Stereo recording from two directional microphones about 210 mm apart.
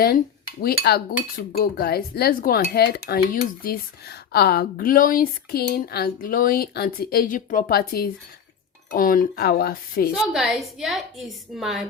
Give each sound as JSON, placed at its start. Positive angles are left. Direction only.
{"t": 0.6, "sound": "speech", "side_deg": 50}
{"t": 10.2, "sound": "a woman's voice", "side_deg": 0}